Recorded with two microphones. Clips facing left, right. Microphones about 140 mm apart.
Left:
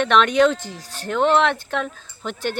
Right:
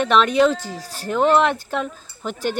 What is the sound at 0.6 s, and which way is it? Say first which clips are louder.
Speech: right 3 dB; 40° right (ahead or behind).